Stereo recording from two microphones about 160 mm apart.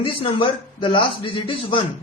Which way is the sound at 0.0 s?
35° left (ahead or behind).